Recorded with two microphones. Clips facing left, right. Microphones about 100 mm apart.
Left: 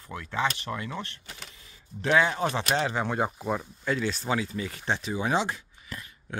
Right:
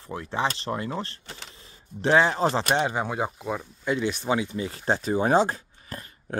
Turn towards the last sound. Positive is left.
turn(degrees=-40)  # may be behind; listen again after turning